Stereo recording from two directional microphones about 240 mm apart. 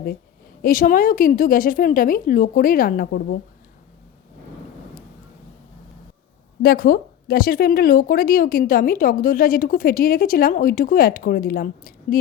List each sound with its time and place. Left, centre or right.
0.6 s speech: left
6.6 s speech: left